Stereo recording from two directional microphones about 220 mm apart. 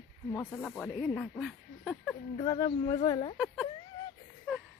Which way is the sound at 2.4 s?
15° left (ahead or behind).